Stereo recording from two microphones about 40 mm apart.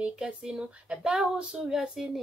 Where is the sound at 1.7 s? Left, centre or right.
Centre.